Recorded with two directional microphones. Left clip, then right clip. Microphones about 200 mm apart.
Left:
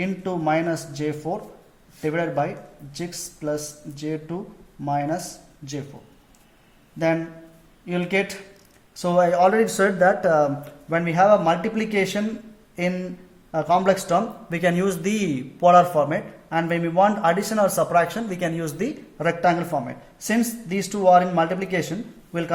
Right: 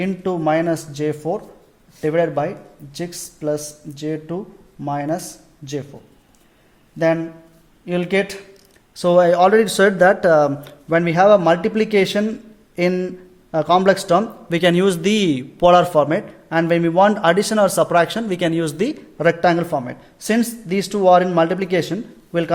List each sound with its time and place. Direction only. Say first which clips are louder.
0.0 s a man's voice: right 5 dB; 55° right (ahead or behind)
7.9 s a man's voice: right 4 dB; 55° right (ahead or behind)